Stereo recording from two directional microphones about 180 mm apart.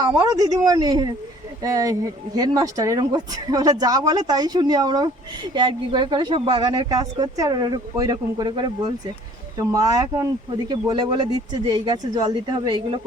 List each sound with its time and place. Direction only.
0.0 s speech: 20° right (ahead or behind)